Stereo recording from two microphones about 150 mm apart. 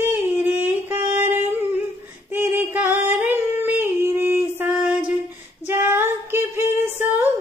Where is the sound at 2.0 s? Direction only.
15° right (ahead or behind).